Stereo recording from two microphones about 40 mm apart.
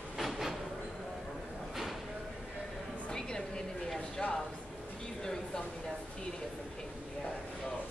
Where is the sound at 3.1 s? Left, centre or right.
Centre.